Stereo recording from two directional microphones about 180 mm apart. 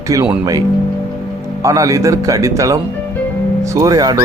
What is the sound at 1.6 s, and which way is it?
A man's voice, 20° right (ahead or behind).